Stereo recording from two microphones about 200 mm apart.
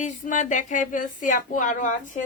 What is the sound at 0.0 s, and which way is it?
Speech, 40° left (ahead or behind).